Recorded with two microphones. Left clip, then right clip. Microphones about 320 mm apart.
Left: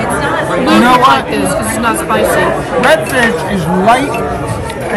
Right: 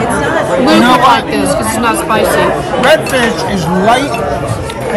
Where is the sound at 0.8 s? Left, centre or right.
Centre.